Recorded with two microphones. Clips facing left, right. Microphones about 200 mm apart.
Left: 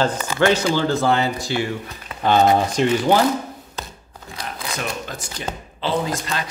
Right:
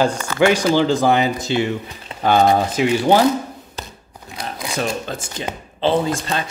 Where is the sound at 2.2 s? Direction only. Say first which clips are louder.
Right 1 dB; 10° right (ahead or behind).